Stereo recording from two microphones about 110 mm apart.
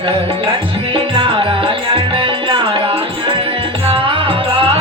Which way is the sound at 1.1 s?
50° right (ahead or behind).